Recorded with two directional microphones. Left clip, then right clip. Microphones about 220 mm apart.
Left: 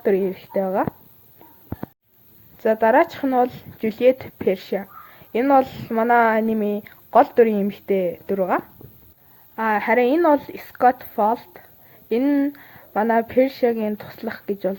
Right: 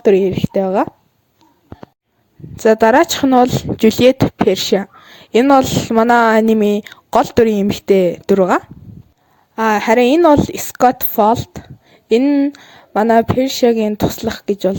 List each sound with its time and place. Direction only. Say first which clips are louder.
0.0 s a woman's voice: right 8 dB; 45° right (ahead or behind)
2.6 s a woman's voice: right 6 dB; 55° right (ahead or behind)